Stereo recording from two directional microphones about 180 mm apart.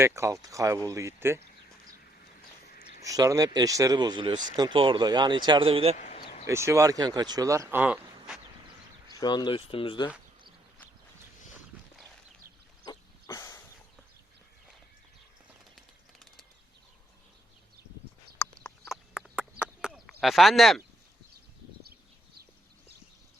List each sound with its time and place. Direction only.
0.0 s speech: 15° right (ahead or behind)
3.0 s speech: 20° right (ahead or behind)
6.0 s a sound: 45° left (ahead or behind)
6.4 s speech: 15° right (ahead or behind)
9.2 s speech: 25° left (ahead or behind)
12.8 s a sound: 20° left (ahead or behind)
18.9 s frog: 5° right (ahead or behind)
20.2 s speech: centre (ahead or behind)